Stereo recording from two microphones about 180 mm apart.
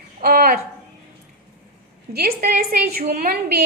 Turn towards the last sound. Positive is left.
turn(degrees=-50)  # may be behind; listen again after turning